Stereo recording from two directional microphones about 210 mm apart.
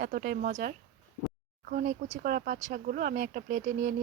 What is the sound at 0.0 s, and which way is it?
Speech, 45° right (ahead or behind).